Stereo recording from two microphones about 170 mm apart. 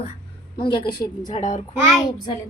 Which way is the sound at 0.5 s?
25° left (ahead or behind).